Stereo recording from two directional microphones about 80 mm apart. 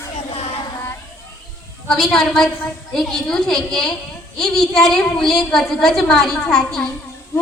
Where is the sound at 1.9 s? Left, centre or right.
Centre.